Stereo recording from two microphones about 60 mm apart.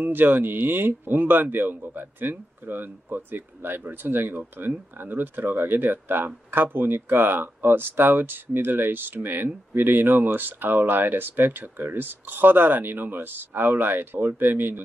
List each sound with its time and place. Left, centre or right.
0.0 s speech: right